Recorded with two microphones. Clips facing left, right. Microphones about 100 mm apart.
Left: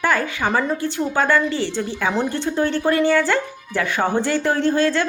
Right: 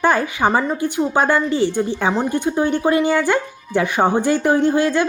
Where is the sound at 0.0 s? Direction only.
20° right (ahead or behind).